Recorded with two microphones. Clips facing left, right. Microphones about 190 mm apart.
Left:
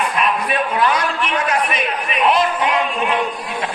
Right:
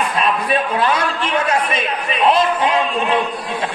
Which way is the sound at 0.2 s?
30° right (ahead or behind).